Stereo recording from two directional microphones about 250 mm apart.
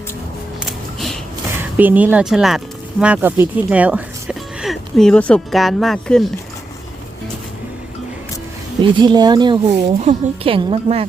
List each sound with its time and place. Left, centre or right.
0.6 s music: centre
1.7 s speech: centre
8.8 s a woman's voice: centre